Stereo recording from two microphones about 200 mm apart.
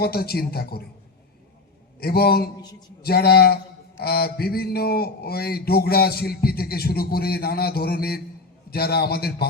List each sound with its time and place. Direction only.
0.0 s mantra: 50° left (ahead or behind)
2.0 s mantra: 50° left (ahead or behind)